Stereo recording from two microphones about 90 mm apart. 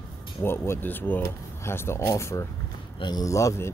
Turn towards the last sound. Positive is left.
turn(degrees=35)  # may be behind; listen again after turning